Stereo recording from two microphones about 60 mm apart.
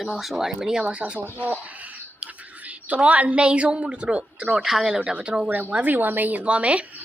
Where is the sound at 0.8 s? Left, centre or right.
Right.